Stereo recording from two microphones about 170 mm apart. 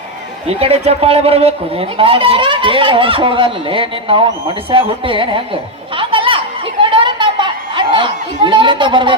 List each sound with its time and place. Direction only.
0.4 s speech: 35° right (ahead or behind)
6.0 s chatter: 30° right (ahead or behind)
6.9 s a sound: 30° right (ahead or behind)